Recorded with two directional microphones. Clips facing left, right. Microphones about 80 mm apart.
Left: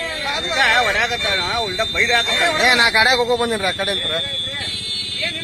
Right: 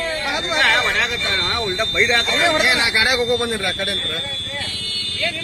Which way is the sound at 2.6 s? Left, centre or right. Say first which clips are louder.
Left 3 dB; left.